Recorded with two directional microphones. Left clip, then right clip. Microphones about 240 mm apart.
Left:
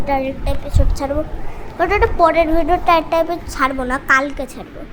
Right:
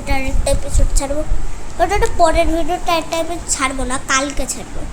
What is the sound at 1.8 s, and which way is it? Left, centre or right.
A woman's voice, centre.